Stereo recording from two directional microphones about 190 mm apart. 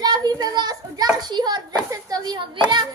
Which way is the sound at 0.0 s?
20° right (ahead or behind).